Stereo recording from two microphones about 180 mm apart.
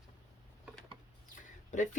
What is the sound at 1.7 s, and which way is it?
Speech, 45° left (ahead or behind).